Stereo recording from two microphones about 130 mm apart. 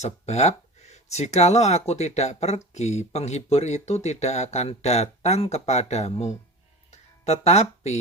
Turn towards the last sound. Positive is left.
turn(degrees=55)  # may be behind; listen again after turning